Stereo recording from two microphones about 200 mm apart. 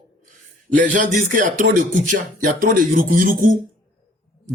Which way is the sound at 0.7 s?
40° right (ahead or behind).